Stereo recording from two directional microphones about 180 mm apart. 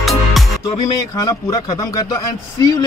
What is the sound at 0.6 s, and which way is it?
A man's voice, 20° left (ahead or behind).